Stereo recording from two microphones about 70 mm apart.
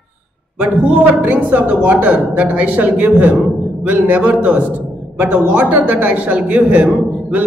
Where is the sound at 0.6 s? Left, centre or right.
Right.